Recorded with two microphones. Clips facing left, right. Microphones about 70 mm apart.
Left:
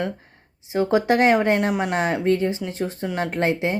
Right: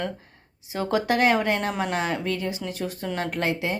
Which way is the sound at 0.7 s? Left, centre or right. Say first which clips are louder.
Left 5 dB; left.